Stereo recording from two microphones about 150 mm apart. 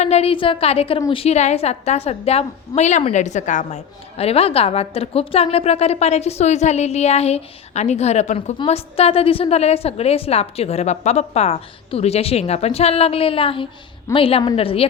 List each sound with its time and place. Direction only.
0.0 s a woman's voice: 45° left (ahead or behind)
4.2 s a woman's voice: 40° left (ahead or behind)